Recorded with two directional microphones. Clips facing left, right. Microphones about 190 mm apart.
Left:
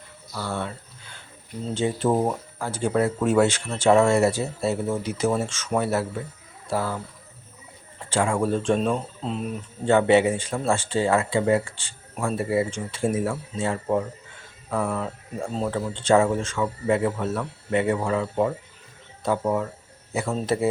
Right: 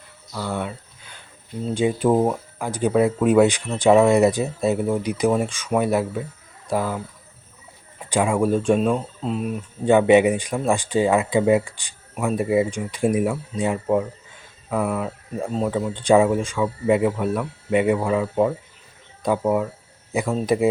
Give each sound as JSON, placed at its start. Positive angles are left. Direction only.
{"t": 0.3, "sound": "cricket", "side_deg": -15}
{"t": 1.7, "sound": "speech", "side_deg": -15}
{"t": 9.8, "sound": "speech", "side_deg": -15}
{"t": 15.9, "sound": "speech", "side_deg": -15}